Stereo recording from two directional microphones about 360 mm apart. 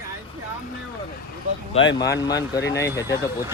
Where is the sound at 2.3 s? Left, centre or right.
Centre.